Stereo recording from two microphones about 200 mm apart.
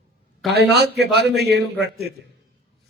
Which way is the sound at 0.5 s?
55° right (ahead or behind).